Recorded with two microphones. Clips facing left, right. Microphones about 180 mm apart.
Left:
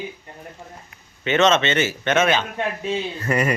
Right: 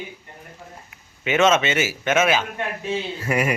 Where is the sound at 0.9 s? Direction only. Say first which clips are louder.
Left 1 dB; 5° right (ahead or behind).